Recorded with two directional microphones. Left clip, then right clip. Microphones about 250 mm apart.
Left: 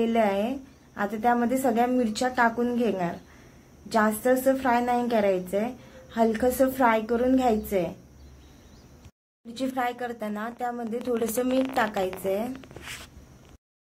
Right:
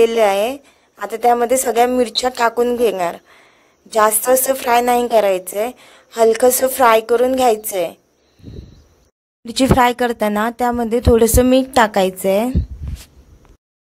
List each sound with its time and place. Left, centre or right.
0.0 s a woman's voice: right
9.4 s a woman's voice: right